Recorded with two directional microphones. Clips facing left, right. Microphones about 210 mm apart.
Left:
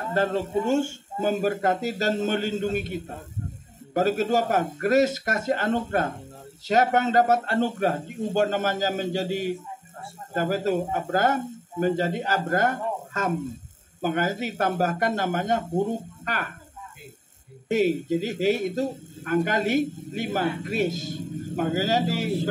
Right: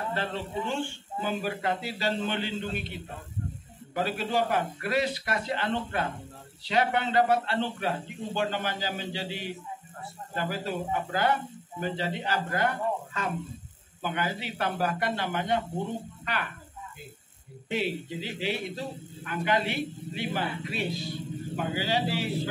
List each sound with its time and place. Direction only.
0.0 s speech: 45° left (ahead or behind)
17.6 s speech: 45° left (ahead or behind)